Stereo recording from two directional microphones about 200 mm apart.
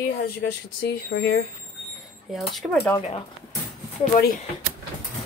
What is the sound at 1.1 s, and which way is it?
Speech, 60° left (ahead or behind).